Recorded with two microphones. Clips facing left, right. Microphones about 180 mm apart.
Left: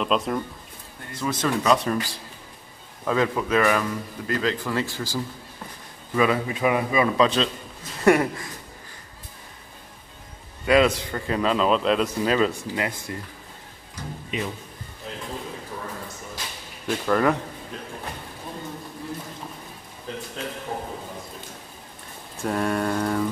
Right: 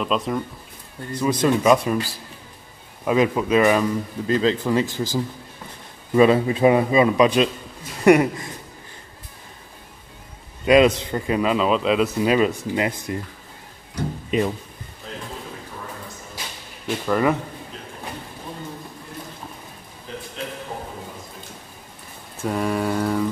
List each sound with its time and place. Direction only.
0.0 s mantra: centre (ahead or behind)
1.1 s a man's voice: 15° right (ahead or behind)
3.1 s a man's voice: 15° right (ahead or behind)
7.2 s a man's voice: 15° right (ahead or behind)
10.6 s a man's voice: 20° right (ahead or behind)
13.9 s speech: 55° right (ahead or behind)
16.8 s mantra: 5° right (ahead or behind)
22.4 s mantra: centre (ahead or behind)